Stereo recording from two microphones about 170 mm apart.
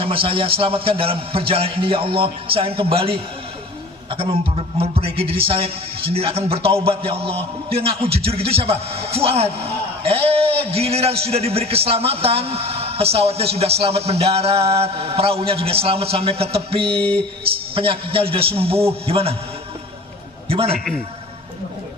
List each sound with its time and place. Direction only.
0.0 s a man's voice: 35° right (ahead or behind)
20.5 s a man's voice: 35° right (ahead or behind)
20.7 s a man's voice: centre (ahead or behind)